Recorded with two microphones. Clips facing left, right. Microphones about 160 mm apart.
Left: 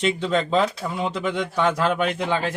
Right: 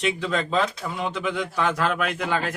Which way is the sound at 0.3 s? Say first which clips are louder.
Left 4 dB; 30° left (ahead or behind).